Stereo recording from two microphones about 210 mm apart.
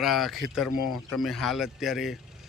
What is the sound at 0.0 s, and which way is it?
Speech, centre (ahead or behind).